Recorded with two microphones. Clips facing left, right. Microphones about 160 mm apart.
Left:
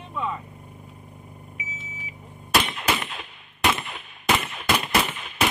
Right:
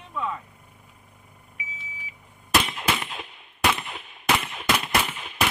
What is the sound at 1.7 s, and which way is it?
Microwave oven, 45° left (ahead or behind).